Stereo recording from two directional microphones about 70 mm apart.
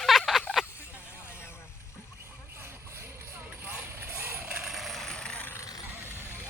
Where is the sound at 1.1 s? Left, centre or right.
Left.